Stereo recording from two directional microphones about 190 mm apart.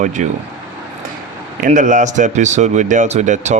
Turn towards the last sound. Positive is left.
turn(degrees=-40)  # may be behind; listen again after turning